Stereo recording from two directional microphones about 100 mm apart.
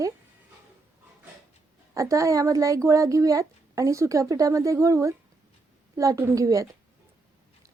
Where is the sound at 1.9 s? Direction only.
30° right (ahead or behind).